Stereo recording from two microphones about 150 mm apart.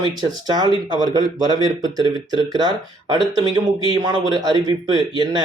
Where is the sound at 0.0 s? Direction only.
25° right (ahead or behind).